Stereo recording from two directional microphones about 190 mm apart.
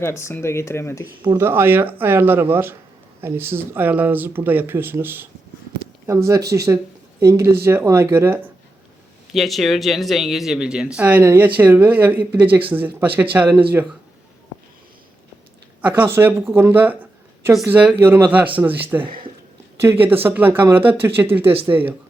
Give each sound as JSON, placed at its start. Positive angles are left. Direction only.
{"t": 0.0, "sound": "speech", "side_deg": 15}
{"t": 1.0, "sound": "speech", "side_deg": -15}
{"t": 9.3, "sound": "speech", "side_deg": 0}
{"t": 15.8, "sound": "speech", "side_deg": -10}